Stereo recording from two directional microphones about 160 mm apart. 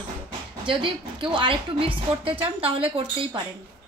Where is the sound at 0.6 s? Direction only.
30° right (ahead or behind).